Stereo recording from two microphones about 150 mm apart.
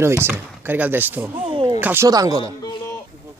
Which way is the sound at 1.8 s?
10° right (ahead or behind).